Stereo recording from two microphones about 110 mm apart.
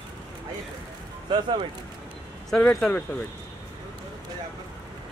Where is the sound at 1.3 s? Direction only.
50° right (ahead or behind).